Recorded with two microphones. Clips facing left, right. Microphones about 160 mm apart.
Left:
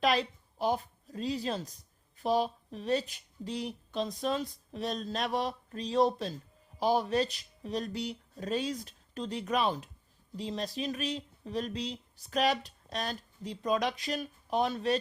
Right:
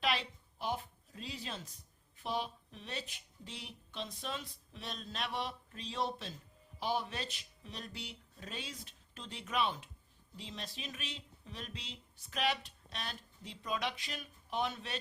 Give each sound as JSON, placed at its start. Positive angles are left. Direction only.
{"t": 0.0, "sound": "a woman's voice", "side_deg": 40}